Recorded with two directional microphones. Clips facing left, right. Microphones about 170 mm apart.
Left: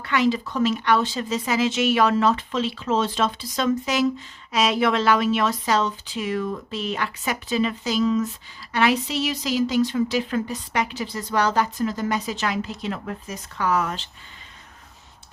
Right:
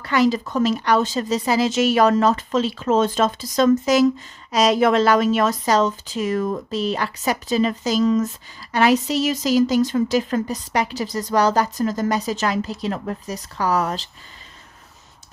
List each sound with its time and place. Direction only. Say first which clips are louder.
0.0 s speech: right 3 dB; 40° right (ahead or behind)